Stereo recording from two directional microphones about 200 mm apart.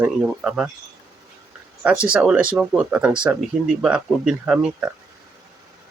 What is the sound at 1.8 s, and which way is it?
Speech, 5° right (ahead or behind).